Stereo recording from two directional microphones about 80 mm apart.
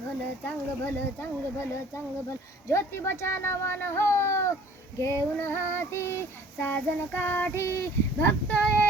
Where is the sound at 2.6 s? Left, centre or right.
Left.